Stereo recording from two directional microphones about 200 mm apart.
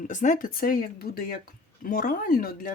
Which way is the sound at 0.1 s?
40° left (ahead or behind).